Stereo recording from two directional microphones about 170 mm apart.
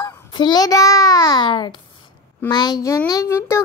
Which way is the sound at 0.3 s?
25° left (ahead or behind).